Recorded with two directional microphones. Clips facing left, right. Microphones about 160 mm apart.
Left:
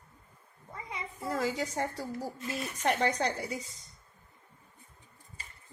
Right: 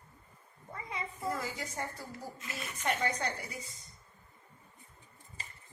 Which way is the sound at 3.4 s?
20° left (ahead or behind).